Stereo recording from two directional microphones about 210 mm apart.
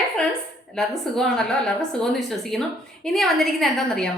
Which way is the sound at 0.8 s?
Centre (ahead or behind).